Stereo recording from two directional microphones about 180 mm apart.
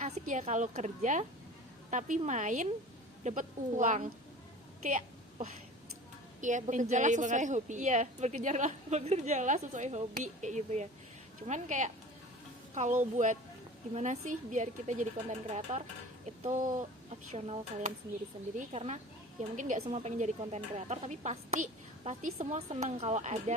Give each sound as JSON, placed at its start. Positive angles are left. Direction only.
{"t": 0.0, "sound": "a woman's voice", "side_deg": -40}
{"t": 4.8, "sound": "a sound", "side_deg": -45}
{"t": 6.4, "sound": "a woman's voice", "side_deg": -45}